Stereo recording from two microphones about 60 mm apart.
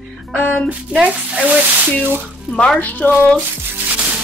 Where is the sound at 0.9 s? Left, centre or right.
Centre.